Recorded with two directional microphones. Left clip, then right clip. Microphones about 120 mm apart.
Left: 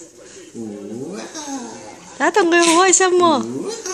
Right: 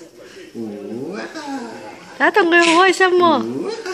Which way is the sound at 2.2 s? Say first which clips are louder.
Right 1 dB; 15° left (ahead or behind).